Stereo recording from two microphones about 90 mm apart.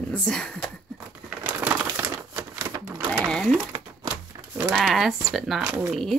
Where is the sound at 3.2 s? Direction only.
5° left (ahead or behind).